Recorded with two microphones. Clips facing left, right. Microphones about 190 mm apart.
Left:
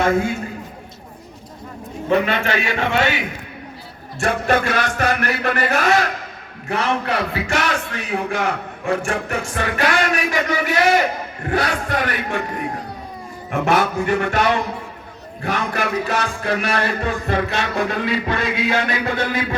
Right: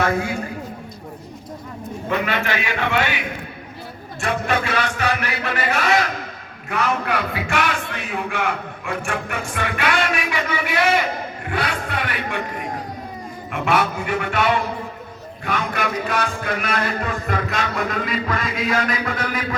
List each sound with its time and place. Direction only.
2.0 s speech: 30° left (ahead or behind)
4.2 s speech: 45° left (ahead or behind)
6.7 s speech: 30° left (ahead or behind)
13.5 s speech: 45° left (ahead or behind)
15.4 s a sound: 35° left (ahead or behind)